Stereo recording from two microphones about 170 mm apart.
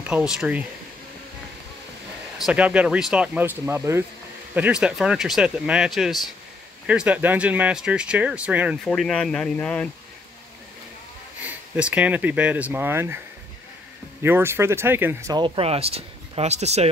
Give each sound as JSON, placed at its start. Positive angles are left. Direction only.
{"t": 0.0, "sound": "speech", "side_deg": -5}
{"t": 2.3, "sound": "speech", "side_deg": -5}
{"t": 11.4, "sound": "speech", "side_deg": -10}
{"t": 14.2, "sound": "speech", "side_deg": -15}
{"t": 15.3, "sound": "speech", "side_deg": -30}